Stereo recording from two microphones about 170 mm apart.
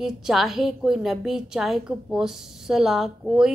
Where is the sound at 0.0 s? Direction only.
Centre (ahead or behind).